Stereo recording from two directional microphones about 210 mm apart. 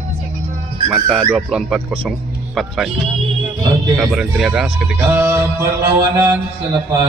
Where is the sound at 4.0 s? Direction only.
5° right (ahead or behind).